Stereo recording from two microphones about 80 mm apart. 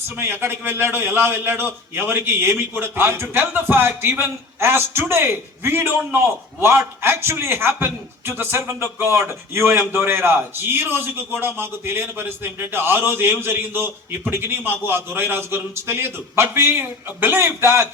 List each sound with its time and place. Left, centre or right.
0.2 s a man's voice: right